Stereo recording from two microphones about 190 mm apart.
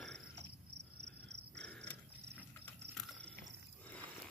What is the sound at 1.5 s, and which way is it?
Crow, 5° left (ahead or behind).